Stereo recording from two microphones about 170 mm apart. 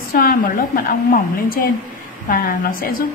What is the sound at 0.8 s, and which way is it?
Speech, 55° left (ahead or behind).